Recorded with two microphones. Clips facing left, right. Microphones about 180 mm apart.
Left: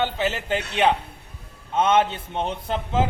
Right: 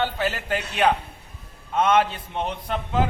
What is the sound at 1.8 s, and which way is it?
A man's voice, 25° left (ahead or behind).